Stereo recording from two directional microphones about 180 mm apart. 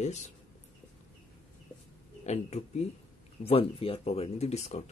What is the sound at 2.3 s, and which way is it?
Speech, 35° left (ahead or behind).